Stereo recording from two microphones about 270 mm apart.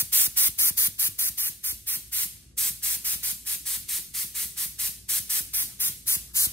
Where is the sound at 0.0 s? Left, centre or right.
Centre.